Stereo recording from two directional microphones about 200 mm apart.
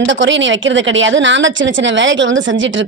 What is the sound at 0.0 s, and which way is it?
Speech, 65° right (ahead or behind).